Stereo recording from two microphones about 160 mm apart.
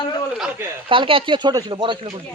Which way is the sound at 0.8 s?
30° right (ahead or behind).